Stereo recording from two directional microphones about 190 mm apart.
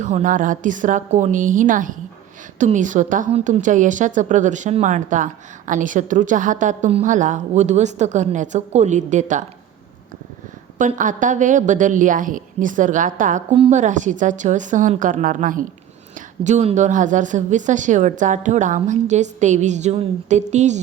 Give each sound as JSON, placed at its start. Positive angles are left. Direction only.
{"t": 0.0, "sound": "a woman's voice", "side_deg": -40}
{"t": 10.8, "sound": "a woman's voice", "side_deg": -40}